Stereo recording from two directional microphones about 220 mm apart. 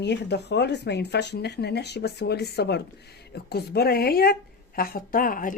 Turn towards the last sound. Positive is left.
turn(degrees=40)  # may be behind; listen again after turning